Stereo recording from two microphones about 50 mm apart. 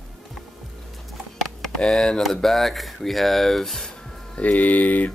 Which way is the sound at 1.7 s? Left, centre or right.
Centre.